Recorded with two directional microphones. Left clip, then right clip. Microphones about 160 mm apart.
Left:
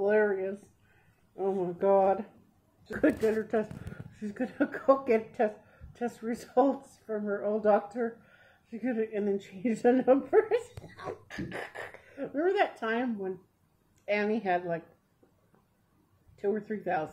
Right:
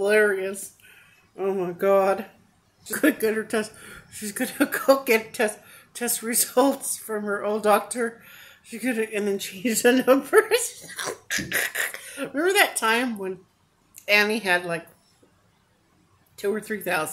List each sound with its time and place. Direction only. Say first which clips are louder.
0.0 s a woman's voice: right 6 dB; 15° right (ahead or behind)
16.3 s a woman's voice: right 5 dB; 15° right (ahead or behind)